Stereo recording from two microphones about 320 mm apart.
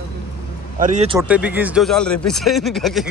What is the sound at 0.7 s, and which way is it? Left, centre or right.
Speech, right.